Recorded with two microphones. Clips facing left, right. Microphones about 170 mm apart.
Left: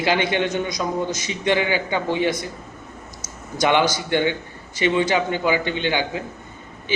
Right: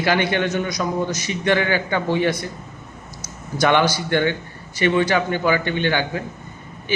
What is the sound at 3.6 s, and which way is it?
A man's voice, 15° left (ahead or behind).